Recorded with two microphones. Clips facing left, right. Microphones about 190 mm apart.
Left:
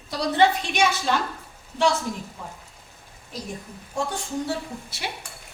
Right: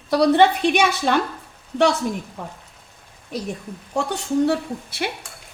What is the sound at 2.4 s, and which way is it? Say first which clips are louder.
Speech: right 5 dB; 65° right (ahead or behind).